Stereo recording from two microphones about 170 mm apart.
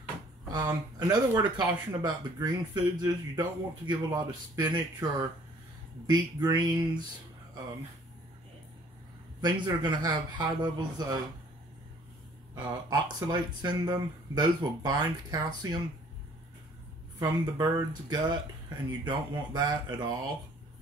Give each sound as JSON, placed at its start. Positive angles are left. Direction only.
{"t": 0.5, "sound": "speech", "side_deg": -25}
{"t": 9.4, "sound": "speech", "side_deg": -25}
{"t": 12.5, "sound": "speech", "side_deg": -25}
{"t": 17.2, "sound": "speech", "side_deg": -20}